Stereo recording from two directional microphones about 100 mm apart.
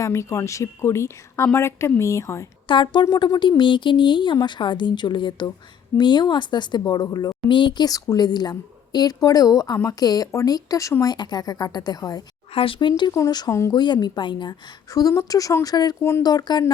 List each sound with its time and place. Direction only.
0.0 s a woman's voice: 30° left (ahead or behind)
2.6 s a woman's voice: 50° left (ahead or behind)
12.5 s speech: 60° left (ahead or behind)
13.1 s a woman's voice: 40° left (ahead or behind)
13.5 s a woman's voice: 30° left (ahead or behind)
13.7 s a woman's voice: 45° left (ahead or behind)
16.0 s a woman's voice: 25° left (ahead or behind)
16.2 s a woman's voice: 45° left (ahead or behind)